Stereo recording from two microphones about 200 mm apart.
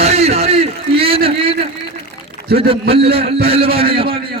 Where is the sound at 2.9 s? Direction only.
30° right (ahead or behind).